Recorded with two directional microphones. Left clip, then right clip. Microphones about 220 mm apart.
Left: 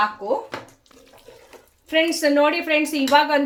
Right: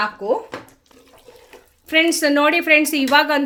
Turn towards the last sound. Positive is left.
turn(degrees=-45)  # may be behind; listen again after turning